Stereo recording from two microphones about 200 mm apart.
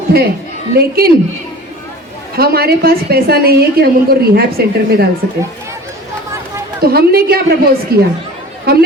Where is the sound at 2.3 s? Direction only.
50° right (ahead or behind).